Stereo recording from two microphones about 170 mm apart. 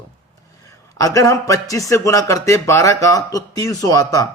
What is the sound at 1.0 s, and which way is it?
A man's voice, 20° left (ahead or behind).